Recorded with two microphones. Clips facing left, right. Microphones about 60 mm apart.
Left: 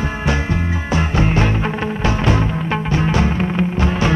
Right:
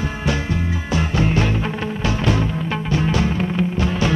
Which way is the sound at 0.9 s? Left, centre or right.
Left.